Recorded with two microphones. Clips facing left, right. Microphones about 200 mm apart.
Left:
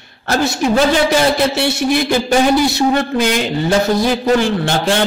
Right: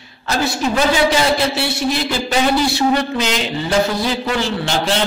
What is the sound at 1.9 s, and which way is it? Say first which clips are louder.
A man's voice: left 5 dB; 55° left (ahead or behind).